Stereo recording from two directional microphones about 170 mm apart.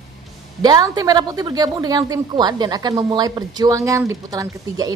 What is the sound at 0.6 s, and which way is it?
A woman's voice, 25° right (ahead or behind).